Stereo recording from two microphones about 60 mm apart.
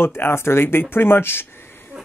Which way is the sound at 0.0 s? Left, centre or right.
Left.